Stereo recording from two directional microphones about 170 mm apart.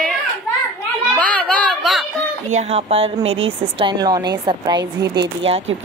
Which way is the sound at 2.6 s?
35° right (ahead or behind).